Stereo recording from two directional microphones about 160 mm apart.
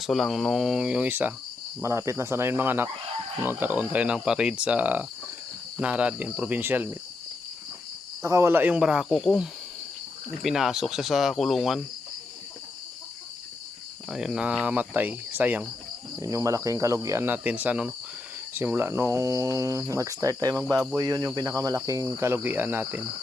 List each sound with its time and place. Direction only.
0.0 s speech: centre (ahead or behind)
8.2 s speech: 20° right (ahead or behind); by 11.8 s centre (ahead or behind)
14.1 s speech: 5° right (ahead or behind)